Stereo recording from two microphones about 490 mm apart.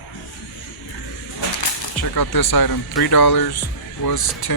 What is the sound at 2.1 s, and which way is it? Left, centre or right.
Speech, left.